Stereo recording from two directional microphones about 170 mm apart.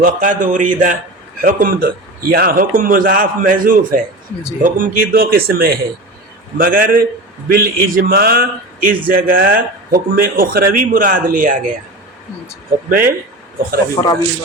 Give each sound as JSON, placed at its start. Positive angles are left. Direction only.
{"t": 0.0, "sound": "speech", "side_deg": -50}
{"t": 12.9, "sound": "speech", "side_deg": -60}
{"t": 14.0, "sound": "speech", "side_deg": 25}